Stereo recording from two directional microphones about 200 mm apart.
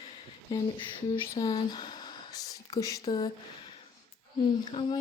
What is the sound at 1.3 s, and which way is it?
Speech, 20° left (ahead or behind).